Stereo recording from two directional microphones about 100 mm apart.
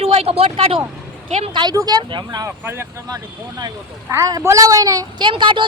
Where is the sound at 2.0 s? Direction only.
50° right (ahead or behind).